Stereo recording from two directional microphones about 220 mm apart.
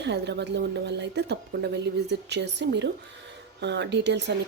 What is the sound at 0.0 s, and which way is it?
Speech, 50° right (ahead or behind).